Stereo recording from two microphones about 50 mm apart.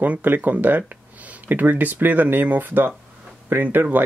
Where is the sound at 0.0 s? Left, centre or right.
Right.